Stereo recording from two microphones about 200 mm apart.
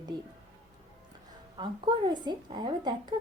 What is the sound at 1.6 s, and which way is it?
A woman's voice, 20° right (ahead or behind).